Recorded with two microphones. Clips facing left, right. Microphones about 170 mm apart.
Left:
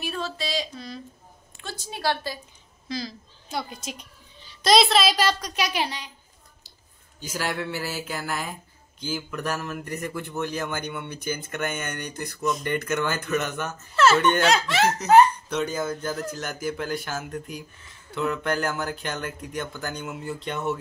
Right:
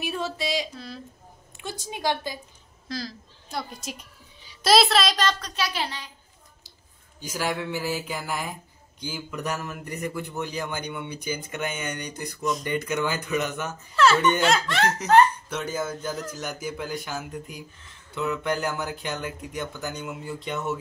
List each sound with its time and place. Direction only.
0.0 s speech: 20° right (ahead or behind)
0.7 s speech: 5° right (ahead or behind)
1.6 s speech: 15° right (ahead or behind)
2.9 s a woman's voice: centre (ahead or behind); by 6.1 s 15° left (ahead or behind)
7.2 s speech: 10° right (ahead or behind)
13.9 s speech: 5° left (ahead or behind)
15.5 s speech: 5° right (ahead or behind)